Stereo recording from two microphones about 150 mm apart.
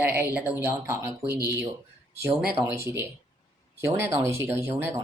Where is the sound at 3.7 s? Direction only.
15° right (ahead or behind).